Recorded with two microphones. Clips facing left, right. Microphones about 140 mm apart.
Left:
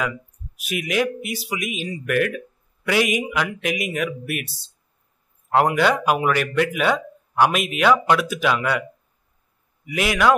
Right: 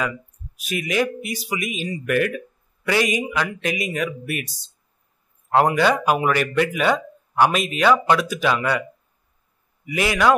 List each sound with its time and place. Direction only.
0.7 s speech: 5° left (ahead or behind)
5.5 s speech: centre (ahead or behind)
9.9 s speech: centre (ahead or behind)